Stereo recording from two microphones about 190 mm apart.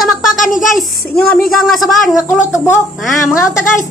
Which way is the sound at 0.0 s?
Centre (ahead or behind).